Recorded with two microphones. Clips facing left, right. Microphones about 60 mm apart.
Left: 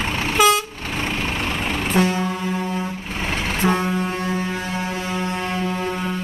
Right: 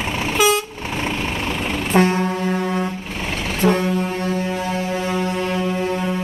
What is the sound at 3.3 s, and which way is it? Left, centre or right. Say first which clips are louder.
Vehicle: right 2 dB; left.